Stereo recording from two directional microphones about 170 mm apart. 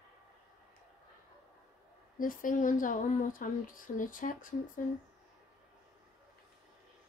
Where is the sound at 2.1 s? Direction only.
55° left (ahead or behind).